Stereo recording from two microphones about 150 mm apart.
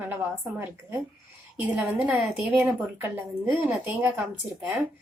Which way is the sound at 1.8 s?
15° right (ahead or behind).